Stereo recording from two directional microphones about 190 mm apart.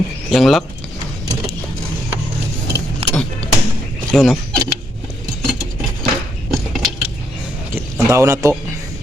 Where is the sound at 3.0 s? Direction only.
30° right (ahead or behind).